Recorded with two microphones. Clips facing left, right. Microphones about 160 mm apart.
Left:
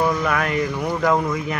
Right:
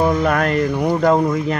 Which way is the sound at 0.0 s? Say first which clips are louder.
Right 4 dB; 30° right (ahead or behind).